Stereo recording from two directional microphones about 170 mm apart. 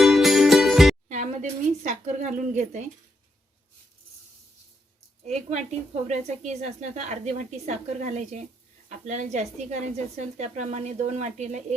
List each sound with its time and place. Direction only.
0.0 s music: centre (ahead or behind)
1.0 s a woman's voice: 45° right (ahead or behind)
5.2 s a woman's voice: 40° right (ahead or behind)